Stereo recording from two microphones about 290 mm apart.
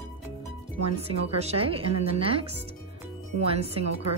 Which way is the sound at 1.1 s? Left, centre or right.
Right.